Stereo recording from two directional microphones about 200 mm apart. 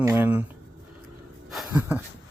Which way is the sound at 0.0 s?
10° right (ahead or behind).